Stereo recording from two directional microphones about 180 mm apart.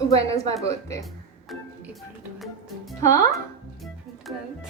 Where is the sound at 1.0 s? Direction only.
Centre (ahead or behind).